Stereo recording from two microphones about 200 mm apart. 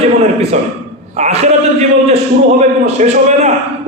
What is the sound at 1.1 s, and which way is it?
Speech, 35° right (ahead or behind).